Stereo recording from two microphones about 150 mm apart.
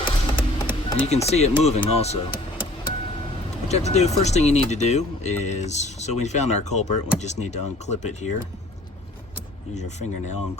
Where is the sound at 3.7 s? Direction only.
45° left (ahead or behind).